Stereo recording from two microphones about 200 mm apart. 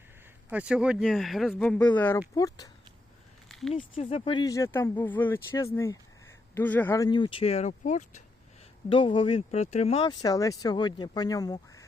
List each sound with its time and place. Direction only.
0.5 s speech: 5° right (ahead or behind); by 2.6 s 20° left (ahead or behind)
3.7 s speech: 30° left (ahead or behind)
8.9 s speech: 25° left (ahead or behind)